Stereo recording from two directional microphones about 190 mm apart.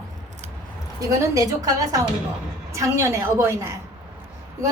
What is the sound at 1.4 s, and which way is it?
A woman's voice, 20° right (ahead or behind).